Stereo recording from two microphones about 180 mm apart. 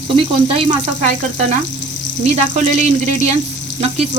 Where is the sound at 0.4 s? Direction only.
30° right (ahead or behind).